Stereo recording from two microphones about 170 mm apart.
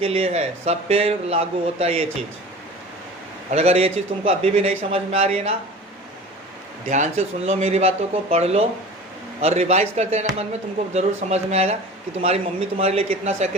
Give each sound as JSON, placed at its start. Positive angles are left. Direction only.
{"t": 0.0, "sound": "a man's voice", "side_deg": -35}
{"t": 3.5, "sound": "a man's voice", "side_deg": -35}
{"t": 6.9, "sound": "a man's voice", "side_deg": -45}